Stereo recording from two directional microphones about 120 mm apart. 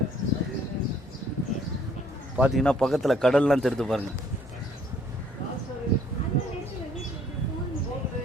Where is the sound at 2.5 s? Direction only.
5° left (ahead or behind).